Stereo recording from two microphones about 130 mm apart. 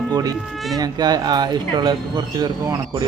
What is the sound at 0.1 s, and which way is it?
A man's voice, 30° right (ahead or behind).